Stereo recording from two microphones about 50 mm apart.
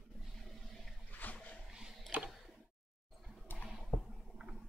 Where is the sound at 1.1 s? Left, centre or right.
Left.